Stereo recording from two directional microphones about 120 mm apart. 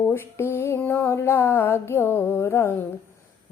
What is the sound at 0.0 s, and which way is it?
A woman's voice, 20° left (ahead or behind).